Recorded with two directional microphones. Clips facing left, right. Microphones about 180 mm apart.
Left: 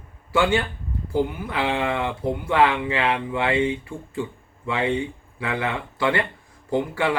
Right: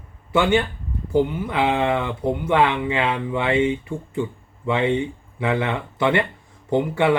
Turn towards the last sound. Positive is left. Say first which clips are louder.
# right 4 dB
turn(degrees=-20)  # may be behind; listen again after turning